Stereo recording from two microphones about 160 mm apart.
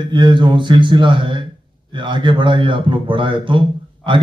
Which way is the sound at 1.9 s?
30° right (ahead or behind).